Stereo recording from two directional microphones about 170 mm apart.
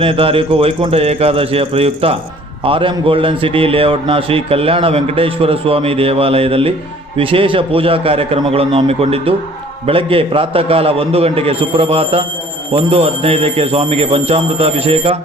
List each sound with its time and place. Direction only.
0.0 s a man's voice: 35° right (ahead or behind)